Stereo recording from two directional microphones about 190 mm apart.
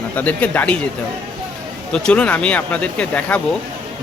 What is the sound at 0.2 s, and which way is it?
Speech, 5° left (ahead or behind).